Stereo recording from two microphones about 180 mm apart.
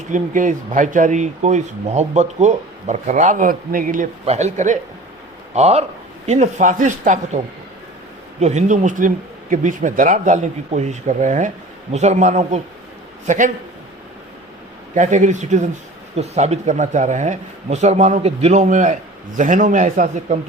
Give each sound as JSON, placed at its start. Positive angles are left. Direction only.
{"t": 0.1, "sound": "speech", "side_deg": -45}
{"t": 14.9, "sound": "speech", "side_deg": -45}